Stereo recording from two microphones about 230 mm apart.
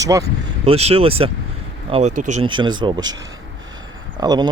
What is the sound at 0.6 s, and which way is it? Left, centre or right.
Speech, right.